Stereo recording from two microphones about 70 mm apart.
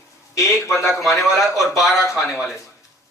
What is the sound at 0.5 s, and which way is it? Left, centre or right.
Speech, left.